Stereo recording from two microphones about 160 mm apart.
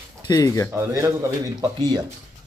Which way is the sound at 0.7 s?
20° right (ahead or behind).